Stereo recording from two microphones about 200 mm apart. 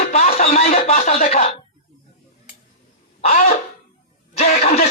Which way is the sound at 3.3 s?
40° left (ahead or behind).